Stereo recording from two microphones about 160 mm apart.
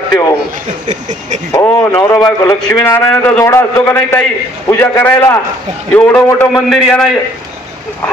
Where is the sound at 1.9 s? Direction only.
10° left (ahead or behind).